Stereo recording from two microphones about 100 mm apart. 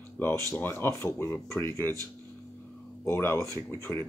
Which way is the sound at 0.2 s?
20° left (ahead or behind).